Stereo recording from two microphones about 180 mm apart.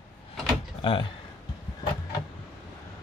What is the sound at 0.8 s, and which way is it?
Speech, 30° left (ahead or behind).